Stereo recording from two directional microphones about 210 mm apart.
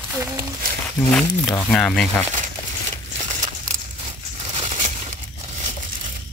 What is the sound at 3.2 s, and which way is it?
Crumpling, 35° right (ahead or behind).